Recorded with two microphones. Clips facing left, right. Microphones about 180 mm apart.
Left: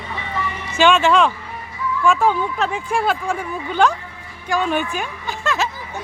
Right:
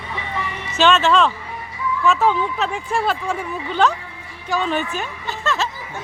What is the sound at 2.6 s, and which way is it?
A woman's voice, centre (ahead or behind).